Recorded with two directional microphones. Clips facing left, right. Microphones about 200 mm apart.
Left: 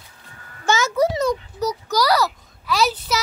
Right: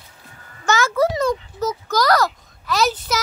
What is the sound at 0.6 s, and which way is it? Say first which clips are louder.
Speech: right 1 dB; 25° left (ahead or behind).